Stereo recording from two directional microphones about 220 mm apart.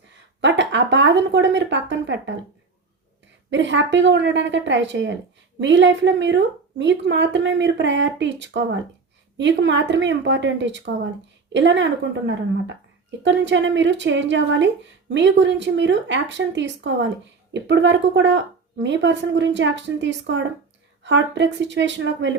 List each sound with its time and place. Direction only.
0.4 s speech: 55° right (ahead or behind)
3.5 s speech: 55° right (ahead or behind)